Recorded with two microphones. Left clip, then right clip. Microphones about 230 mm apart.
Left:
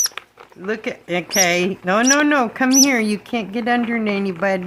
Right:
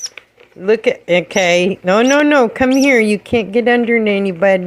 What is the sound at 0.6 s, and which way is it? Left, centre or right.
Speech, centre.